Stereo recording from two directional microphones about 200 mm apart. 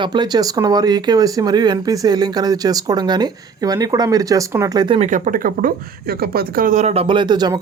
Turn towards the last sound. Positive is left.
turn(degrees=-20)  # may be behind; listen again after turning